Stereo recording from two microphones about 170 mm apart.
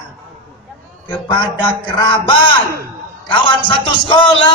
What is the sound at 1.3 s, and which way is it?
Speech, 25° left (ahead or behind).